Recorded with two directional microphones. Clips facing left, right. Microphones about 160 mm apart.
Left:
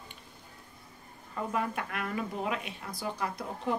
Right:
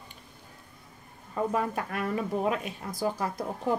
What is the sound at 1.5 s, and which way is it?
Speech, 35° right (ahead or behind).